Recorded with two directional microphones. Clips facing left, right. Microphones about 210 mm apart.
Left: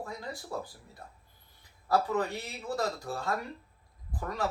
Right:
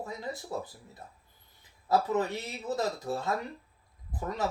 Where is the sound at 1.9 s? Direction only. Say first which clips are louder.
Right 1 dB; 20° right (ahead or behind).